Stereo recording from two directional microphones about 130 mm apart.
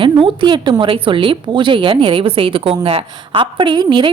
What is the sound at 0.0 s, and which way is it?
A woman's voice, 40° right (ahead or behind).